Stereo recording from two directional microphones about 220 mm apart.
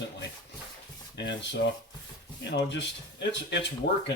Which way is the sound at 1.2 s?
55° left (ahead or behind).